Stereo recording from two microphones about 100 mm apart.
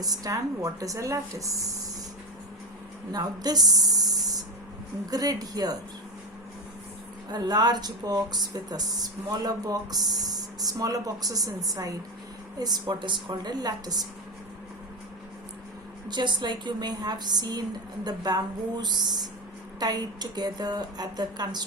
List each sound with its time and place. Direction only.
0.0 s speech: 40° right (ahead or behind)
3.1 s speech: 40° right (ahead or behind)
7.3 s speech: 45° right (ahead or behind)
16.0 s speech: 50° right (ahead or behind)